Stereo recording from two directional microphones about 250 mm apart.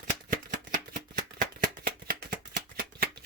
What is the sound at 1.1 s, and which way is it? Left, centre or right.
Shuffling cards, right.